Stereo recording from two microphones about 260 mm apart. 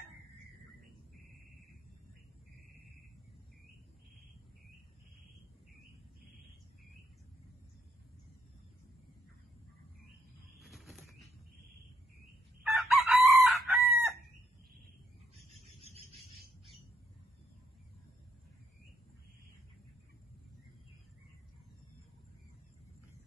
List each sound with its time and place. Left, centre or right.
10.6 s bird flight: centre
12.7 s chicken: centre
15.6 s cricket: right